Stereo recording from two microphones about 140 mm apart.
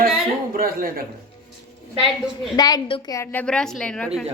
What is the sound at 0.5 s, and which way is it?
Speech, 90° right.